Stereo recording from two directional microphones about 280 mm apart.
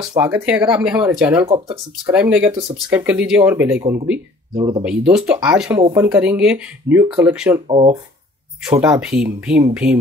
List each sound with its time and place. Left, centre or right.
0.1 s speech: centre
1.5 s speech: centre
2.1 s speech: centre
4.8 s speech: centre
5.8 s speech: centre
6.0 s speech: centre
7.6 s speech: centre
8.8 s speech: centre